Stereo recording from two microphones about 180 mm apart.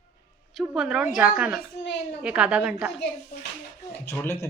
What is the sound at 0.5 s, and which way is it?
A woman's voice, centre (ahead or behind).